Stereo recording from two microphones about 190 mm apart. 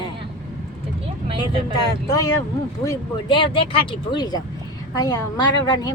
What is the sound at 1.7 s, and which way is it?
Speech, 20° left (ahead or behind).